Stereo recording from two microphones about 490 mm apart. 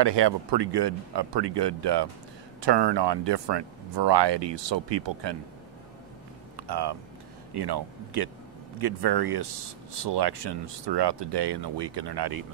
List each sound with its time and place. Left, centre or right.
0.0 s speech: right
6.5 s a sound: right
7.5 s speech: right